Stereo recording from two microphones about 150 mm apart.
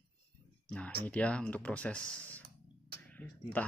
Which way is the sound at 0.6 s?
10° left (ahead or behind).